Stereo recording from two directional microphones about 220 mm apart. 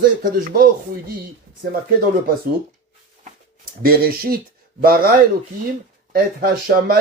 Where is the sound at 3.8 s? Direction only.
40° right (ahead or behind).